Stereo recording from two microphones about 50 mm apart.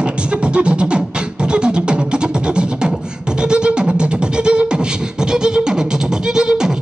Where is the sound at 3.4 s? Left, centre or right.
Centre.